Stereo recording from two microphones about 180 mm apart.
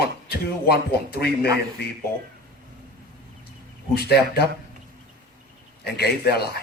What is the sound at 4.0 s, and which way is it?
Speech, 65° left (ahead or behind).